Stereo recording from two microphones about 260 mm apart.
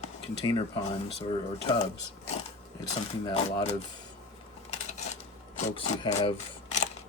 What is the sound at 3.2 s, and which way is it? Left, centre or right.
Speech, centre.